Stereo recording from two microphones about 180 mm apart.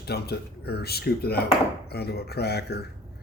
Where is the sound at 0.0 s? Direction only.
65° left (ahead or behind).